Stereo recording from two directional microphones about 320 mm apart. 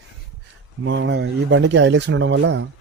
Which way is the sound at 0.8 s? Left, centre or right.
Right.